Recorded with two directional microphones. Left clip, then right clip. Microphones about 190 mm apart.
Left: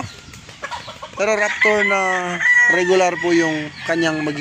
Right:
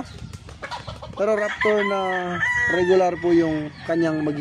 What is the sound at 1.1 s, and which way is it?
Speech, 10° right (ahead or behind).